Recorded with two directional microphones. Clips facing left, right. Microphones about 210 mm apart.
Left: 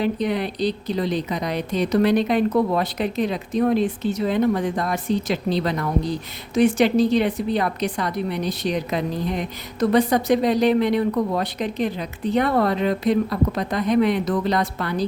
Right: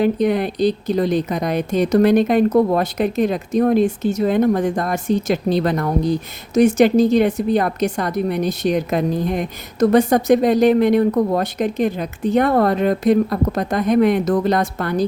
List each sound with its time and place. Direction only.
0.0 s a woman's voice: 50° right (ahead or behind)